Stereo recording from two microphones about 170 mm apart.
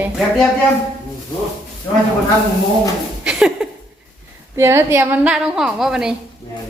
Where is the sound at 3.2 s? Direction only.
5° right (ahead or behind).